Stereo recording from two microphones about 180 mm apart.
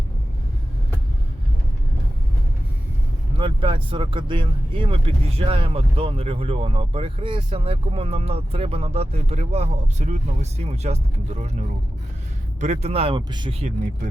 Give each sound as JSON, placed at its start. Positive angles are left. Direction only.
{"t": 3.3, "sound": "speech", "side_deg": -25}
{"t": 12.5, "sound": "speech", "side_deg": -40}